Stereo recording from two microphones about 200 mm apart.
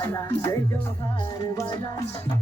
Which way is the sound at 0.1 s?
15° left (ahead or behind).